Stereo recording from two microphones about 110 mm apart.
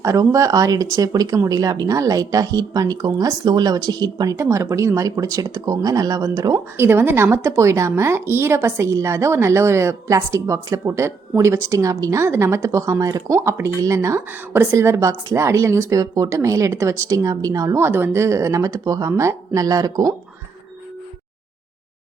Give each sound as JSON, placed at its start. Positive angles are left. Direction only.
{"t": 0.0, "sound": "speech", "side_deg": -30}
{"t": 6.7, "sound": "a woman's voice", "side_deg": -20}